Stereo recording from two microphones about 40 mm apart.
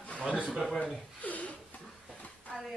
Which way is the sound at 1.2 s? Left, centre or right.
Left.